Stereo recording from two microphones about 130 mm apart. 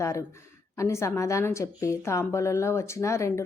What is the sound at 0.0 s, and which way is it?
A woman's voice, 25° left (ahead or behind).